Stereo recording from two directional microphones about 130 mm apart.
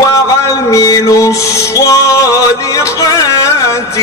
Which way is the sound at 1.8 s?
25° left (ahead or behind).